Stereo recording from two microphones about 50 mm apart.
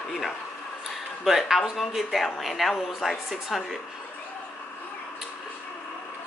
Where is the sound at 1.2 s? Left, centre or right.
Centre.